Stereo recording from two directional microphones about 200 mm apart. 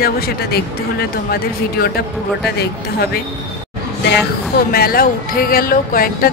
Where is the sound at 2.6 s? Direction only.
55° left (ahead or behind).